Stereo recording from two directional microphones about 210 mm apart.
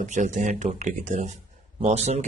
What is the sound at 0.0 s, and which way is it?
Speech, 35° right (ahead or behind).